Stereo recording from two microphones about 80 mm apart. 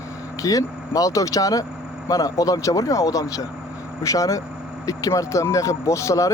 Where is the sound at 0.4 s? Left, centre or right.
Left.